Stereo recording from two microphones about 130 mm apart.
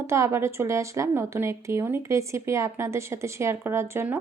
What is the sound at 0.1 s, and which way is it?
Speech, 20° right (ahead or behind).